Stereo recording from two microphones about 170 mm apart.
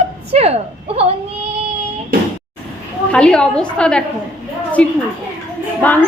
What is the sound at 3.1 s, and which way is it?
A woman's voice, 5° left (ahead or behind).